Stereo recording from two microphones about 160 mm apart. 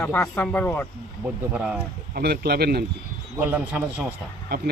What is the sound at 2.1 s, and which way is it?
Speech, 75° right (ahead or behind).